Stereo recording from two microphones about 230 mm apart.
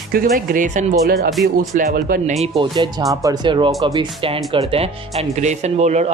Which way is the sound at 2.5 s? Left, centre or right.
Centre.